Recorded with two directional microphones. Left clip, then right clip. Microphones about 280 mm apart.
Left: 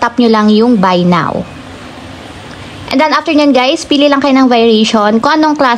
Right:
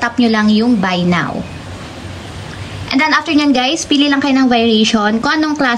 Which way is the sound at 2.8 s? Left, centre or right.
Centre.